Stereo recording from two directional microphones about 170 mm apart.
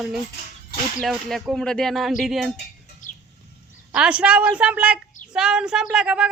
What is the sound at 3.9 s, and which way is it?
A woman's voice, 5° right (ahead or behind).